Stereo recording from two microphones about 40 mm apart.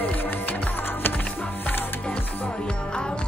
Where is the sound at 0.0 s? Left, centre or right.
Left.